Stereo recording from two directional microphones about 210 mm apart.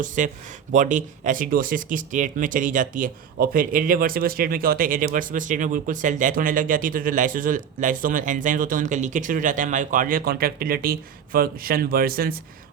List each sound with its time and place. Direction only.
0.2 s speech: 35° right (ahead or behind)